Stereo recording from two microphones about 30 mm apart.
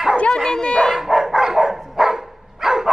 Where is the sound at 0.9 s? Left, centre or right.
Centre.